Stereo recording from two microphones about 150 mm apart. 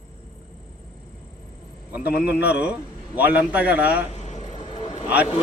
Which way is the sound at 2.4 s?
10° right (ahead or behind).